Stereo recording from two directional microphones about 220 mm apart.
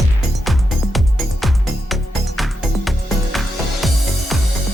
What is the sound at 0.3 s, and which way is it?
Music, centre (ahead or behind).